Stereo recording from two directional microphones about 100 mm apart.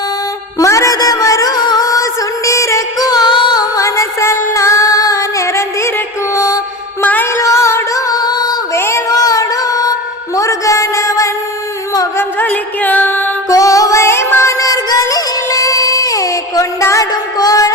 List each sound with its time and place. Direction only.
0.6 s music: 30° left (ahead or behind)
6.3 s mantra: 35° left (ahead or behind)
7.0 s music: 20° left (ahead or behind); by 8.5 s 40° left (ahead or behind)
8.7 s child singing: 25° left (ahead or behind)
9.1 s music: 35° left (ahead or behind)
10.3 s a sound: 35° left (ahead or behind)
12.1 s music: 15° left (ahead or behind)
13.5 s music: 35° left (ahead or behind)
14.6 s music: 35° left (ahead or behind)